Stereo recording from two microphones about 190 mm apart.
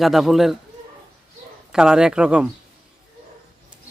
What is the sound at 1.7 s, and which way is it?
Speech, 5° right (ahead or behind).